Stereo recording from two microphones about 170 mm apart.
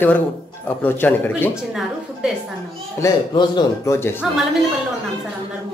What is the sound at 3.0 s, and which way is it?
A man's voice, 25° left (ahead or behind).